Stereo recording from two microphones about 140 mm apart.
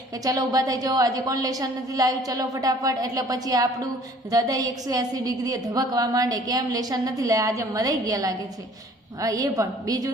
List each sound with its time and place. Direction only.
0.3 s a woman's voice: 25° right (ahead or behind)